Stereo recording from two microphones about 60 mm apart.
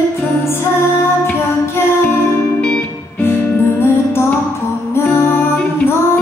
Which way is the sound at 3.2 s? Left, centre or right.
Left.